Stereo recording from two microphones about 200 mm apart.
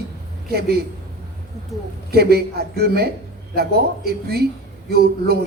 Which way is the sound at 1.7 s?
Centre (ahead or behind).